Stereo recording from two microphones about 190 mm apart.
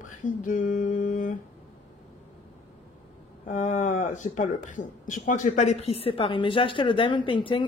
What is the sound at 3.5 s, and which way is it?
Speech, 40° left (ahead or behind).